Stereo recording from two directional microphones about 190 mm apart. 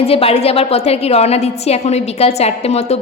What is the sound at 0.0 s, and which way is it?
A woman's voice, 30° left (ahead or behind).